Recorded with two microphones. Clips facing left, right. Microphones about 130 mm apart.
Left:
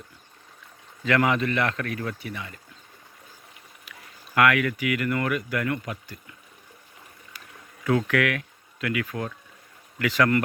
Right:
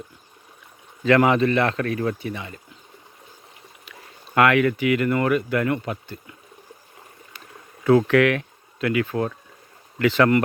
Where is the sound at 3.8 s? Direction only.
30° right (ahead or behind).